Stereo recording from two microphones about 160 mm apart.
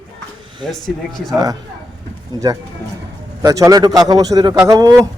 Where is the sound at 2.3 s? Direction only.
25° right (ahead or behind).